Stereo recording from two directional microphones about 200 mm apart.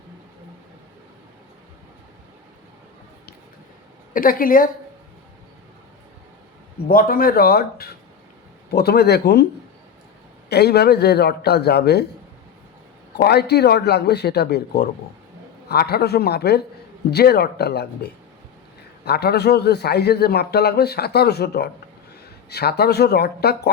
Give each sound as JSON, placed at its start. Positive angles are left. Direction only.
{"t": 4.1, "sound": "speech", "side_deg": 45}
{"t": 6.8, "sound": "a man's voice", "side_deg": 45}
{"t": 10.5, "sound": "a man's voice", "side_deg": 55}
{"t": 13.1, "sound": "a man's voice", "side_deg": 55}